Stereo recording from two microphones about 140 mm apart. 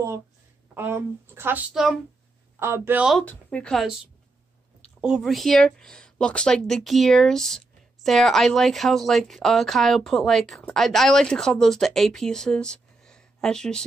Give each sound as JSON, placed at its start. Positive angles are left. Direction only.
{"t": 0.7, "sound": "speech", "side_deg": -15}
{"t": 1.7, "sound": "speech", "side_deg": 0}
{"t": 2.6, "sound": "speech", "side_deg": -20}
{"t": 3.3, "sound": "speech", "side_deg": 10}
{"t": 5.0, "sound": "speech", "side_deg": -5}